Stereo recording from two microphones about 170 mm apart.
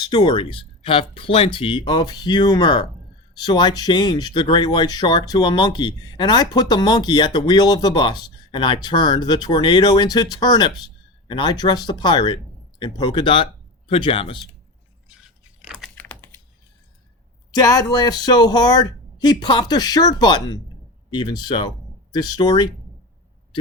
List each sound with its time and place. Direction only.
0.0 s speech: 25° left (ahead or behind)
15.6 s computer keyboard: centre (ahead or behind)
17.5 s speech: 20° left (ahead or behind)